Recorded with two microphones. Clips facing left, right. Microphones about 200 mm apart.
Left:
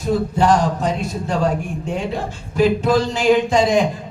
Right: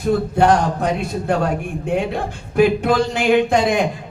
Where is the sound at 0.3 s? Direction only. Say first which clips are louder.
Right 1 dB; 60° right (ahead or behind).